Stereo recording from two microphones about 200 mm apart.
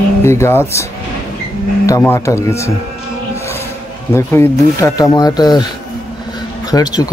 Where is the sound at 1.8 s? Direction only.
15° left (ahead or behind).